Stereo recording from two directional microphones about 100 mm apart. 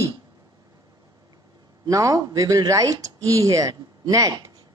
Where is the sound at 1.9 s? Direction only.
35° right (ahead or behind).